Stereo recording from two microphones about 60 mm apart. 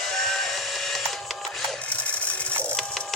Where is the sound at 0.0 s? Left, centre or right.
Centre.